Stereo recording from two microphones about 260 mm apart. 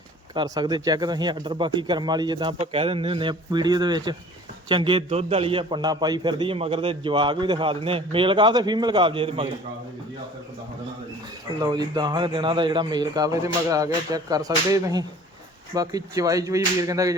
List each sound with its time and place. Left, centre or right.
0.3 s a man's voice: centre
11.6 s speech: centre